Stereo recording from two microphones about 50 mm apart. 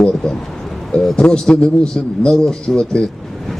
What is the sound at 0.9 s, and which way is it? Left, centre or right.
A man's voice, centre.